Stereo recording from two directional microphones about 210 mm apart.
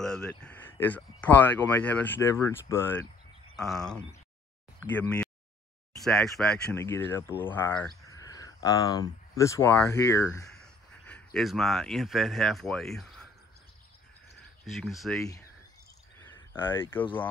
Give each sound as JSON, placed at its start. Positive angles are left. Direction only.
{"t": 0.0, "sound": "speech", "side_deg": 5}
{"t": 3.5, "sound": "speech", "side_deg": 0}
{"t": 14.7, "sound": "speech", "side_deg": 0}
{"t": 16.5, "sound": "speech", "side_deg": 25}